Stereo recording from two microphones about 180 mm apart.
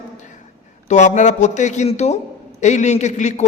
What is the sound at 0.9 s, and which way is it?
A man's voice, 40° left (ahead or behind).